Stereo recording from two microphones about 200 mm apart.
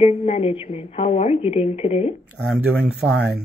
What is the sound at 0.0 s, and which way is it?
Speech, 30° left (ahead or behind).